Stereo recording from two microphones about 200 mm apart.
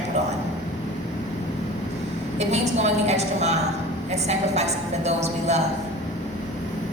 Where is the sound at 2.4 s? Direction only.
35° right (ahead or behind).